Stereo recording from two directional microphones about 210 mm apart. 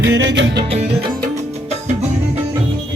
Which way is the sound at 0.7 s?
30° right (ahead or behind).